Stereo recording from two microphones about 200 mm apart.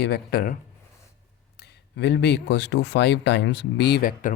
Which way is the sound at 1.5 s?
55° left (ahead or behind).